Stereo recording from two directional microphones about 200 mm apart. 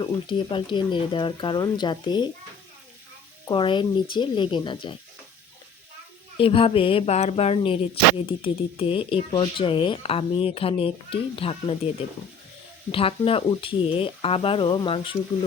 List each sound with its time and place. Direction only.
0.0 s speech: 25° left (ahead or behind)
3.4 s speech: 25° left (ahead or behind)
6.3 s speech: 25° left (ahead or behind)